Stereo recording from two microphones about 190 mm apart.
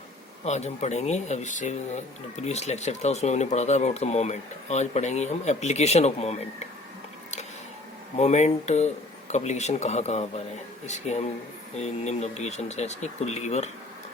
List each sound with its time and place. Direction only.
0.4 s speech: 35° left (ahead or behind)
8.2 s speech: 35° left (ahead or behind)